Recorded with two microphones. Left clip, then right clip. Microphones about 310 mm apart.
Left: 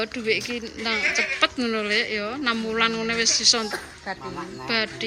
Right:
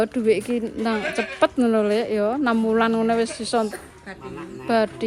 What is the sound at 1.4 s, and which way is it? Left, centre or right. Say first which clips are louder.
Speech: right 4 dB; centre.